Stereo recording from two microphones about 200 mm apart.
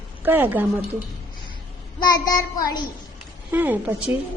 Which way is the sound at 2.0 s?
20° left (ahead or behind).